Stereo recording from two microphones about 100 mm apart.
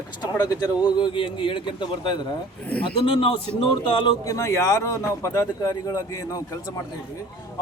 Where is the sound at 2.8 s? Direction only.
65° left (ahead or behind).